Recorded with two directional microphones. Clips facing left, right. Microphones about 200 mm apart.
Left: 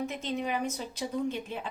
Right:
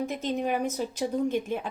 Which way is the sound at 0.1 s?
40° right (ahead or behind).